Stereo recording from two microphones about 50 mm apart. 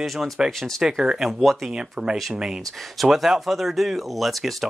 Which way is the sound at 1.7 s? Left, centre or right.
Centre.